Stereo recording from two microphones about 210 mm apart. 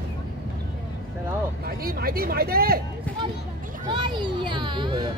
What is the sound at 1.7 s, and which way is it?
Speech, 45° right (ahead or behind).